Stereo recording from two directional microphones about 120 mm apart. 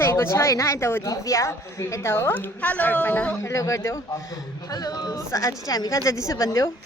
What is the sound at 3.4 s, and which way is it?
A woman's voice, 25° left (ahead or behind).